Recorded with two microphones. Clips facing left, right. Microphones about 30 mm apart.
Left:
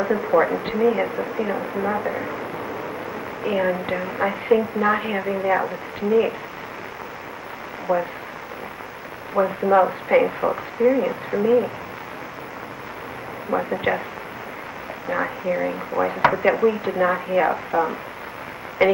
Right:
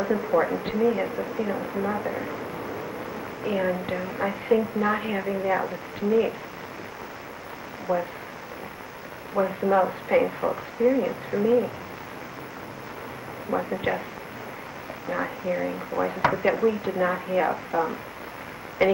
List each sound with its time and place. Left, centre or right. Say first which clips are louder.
0.0 s a woman's voice: left 4 dB; centre
7.9 s a woman's voice: left 4 dB; centre
9.3 s speech: left 4 dB; centre
13.5 s speech: left 4 dB; centre
15.0 s a woman's voice: left 4 dB; centre
18.8 s a woman's voice: left 4 dB; centre